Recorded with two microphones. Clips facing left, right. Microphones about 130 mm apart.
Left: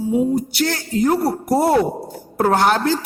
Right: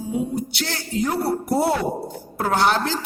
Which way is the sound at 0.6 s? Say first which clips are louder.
Left 6 dB; 45° left (ahead or behind).